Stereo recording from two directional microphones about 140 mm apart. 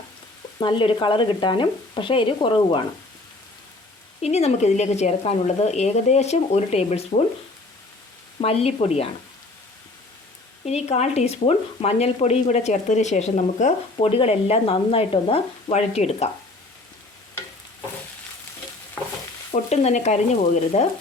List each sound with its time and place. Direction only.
0.6 s speech: 35° left (ahead or behind)
4.2 s speech: 50° left (ahead or behind)
8.4 s speech: 45° left (ahead or behind)
10.7 s speech: 50° left (ahead or behind)
19.5 s stir: 50° left (ahead or behind)
20.7 s speech: 45° left (ahead or behind)